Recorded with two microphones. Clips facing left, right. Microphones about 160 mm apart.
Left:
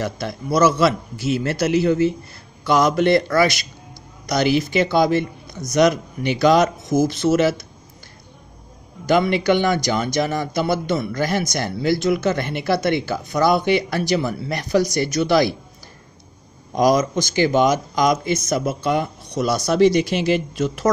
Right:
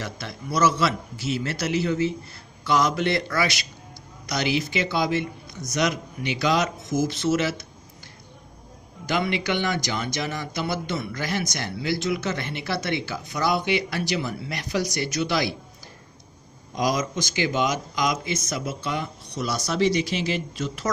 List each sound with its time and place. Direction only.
0.0 s a man's voice: 45° left (ahead or behind)
9.0 s a man's voice: 45° left (ahead or behind)
16.7 s a man's voice: 45° left (ahead or behind)